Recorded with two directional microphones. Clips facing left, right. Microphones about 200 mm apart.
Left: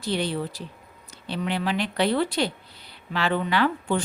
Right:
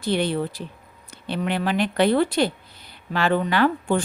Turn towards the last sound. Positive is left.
turn(degrees=-45)  # may be behind; listen again after turning